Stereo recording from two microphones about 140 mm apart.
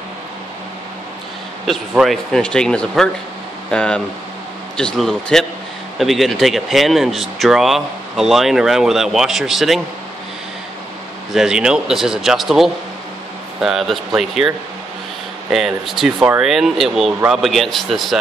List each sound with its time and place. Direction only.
1.7 s speech: centre (ahead or behind)
11.3 s speech: 5° right (ahead or behind)
15.5 s speech: centre (ahead or behind)